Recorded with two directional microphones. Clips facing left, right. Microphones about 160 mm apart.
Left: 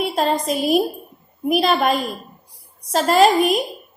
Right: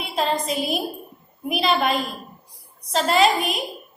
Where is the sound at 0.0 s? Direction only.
45° left (ahead or behind).